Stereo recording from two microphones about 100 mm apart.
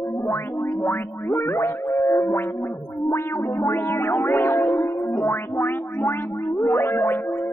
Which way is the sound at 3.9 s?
25° left (ahead or behind).